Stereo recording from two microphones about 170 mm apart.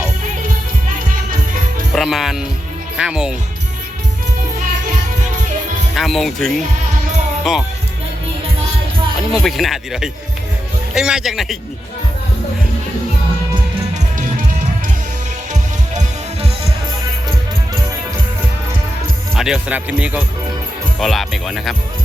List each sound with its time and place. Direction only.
2.0 s speech: centre (ahead or behind)
5.9 s speech: centre (ahead or behind)
9.3 s speech: centre (ahead or behind)
13.9 s music: 50° right (ahead or behind)
19.3 s speech: 5° right (ahead or behind)